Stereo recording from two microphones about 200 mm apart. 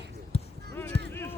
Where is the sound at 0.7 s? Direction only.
10° left (ahead or behind).